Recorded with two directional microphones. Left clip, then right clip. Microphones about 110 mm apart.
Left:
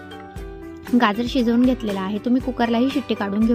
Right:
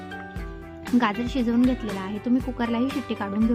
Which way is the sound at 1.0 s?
45° left (ahead or behind).